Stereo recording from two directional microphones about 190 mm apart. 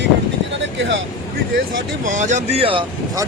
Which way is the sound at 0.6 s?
75° right (ahead or behind).